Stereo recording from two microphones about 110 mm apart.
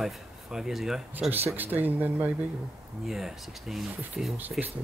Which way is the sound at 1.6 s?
15° right (ahead or behind).